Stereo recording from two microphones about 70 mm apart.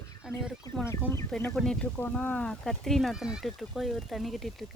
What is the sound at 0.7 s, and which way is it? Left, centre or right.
Speech, left.